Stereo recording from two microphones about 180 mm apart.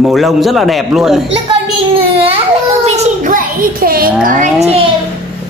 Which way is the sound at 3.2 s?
50° right (ahead or behind).